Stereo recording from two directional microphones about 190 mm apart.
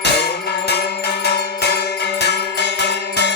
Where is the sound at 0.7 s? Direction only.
60° left (ahead or behind).